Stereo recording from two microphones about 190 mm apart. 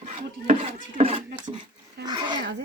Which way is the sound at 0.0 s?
35° right (ahead or behind).